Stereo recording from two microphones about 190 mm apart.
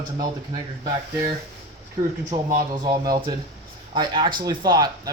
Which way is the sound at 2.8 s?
20° right (ahead or behind).